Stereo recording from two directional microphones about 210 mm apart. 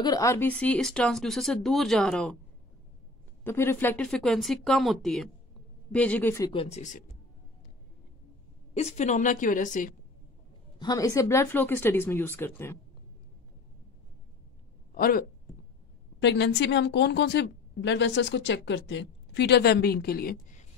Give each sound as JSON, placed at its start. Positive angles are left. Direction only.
{"t": 0.0, "sound": "speech", "side_deg": 15}
{"t": 3.4, "sound": "speech", "side_deg": 10}
{"t": 6.5, "sound": "a woman's voice", "side_deg": 30}
{"t": 8.7, "sound": "a woman's voice", "side_deg": 35}
{"t": 10.8, "sound": "speech", "side_deg": 15}
{"t": 15.0, "sound": "speech", "side_deg": 40}
{"t": 16.2, "sound": "a woman's voice", "side_deg": 55}